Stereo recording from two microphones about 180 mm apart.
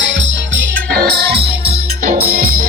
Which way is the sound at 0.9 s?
65° right (ahead or behind).